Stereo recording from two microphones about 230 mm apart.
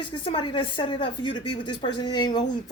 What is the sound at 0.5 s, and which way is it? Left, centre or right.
A woman's voice, left.